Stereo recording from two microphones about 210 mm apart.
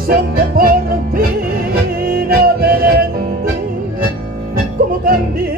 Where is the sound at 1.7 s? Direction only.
45° right (ahead or behind).